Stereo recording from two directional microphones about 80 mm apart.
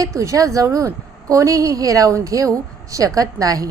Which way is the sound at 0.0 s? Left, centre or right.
Right.